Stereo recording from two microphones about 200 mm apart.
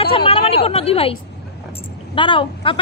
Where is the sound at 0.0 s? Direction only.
25° left (ahead or behind).